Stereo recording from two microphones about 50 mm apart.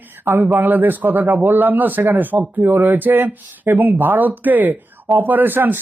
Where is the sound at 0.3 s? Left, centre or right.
Right.